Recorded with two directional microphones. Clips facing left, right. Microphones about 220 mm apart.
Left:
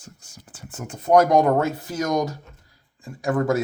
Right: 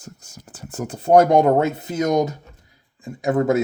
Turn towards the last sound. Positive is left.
turn(degrees=-20)  # may be behind; listen again after turning